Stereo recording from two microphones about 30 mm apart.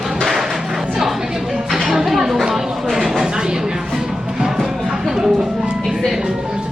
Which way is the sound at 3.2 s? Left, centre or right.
Right.